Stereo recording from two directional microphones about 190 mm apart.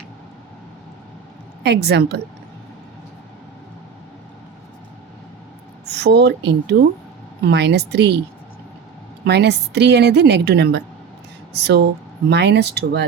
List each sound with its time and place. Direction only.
1.6 s a woman's voice: 60° right (ahead or behind)
5.8 s a woman's voice: 60° right (ahead or behind)
9.2 s a woman's voice: 60° right (ahead or behind)